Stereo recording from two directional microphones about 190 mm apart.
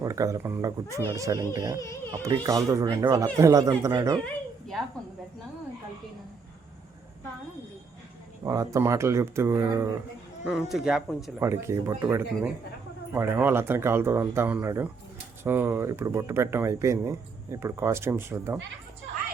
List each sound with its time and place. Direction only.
0.0 s speech: 15° right (ahead or behind)
8.4 s speech: 20° right (ahead or behind)
10.4 s speech: centre (ahead or behind)
11.3 s speech: 15° right (ahead or behind)